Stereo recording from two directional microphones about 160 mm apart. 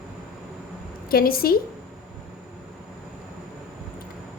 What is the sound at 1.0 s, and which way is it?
Speech, 70° left (ahead or behind).